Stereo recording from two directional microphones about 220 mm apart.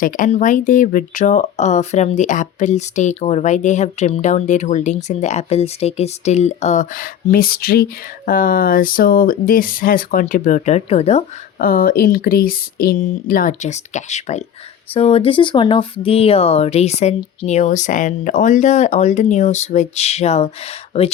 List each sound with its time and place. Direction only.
0.0 s speech: 35° left (ahead or behind)
11.6 s speech: 40° left (ahead or behind)